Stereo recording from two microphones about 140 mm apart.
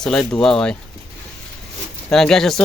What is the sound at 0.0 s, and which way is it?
Speech, 5° left (ahead or behind).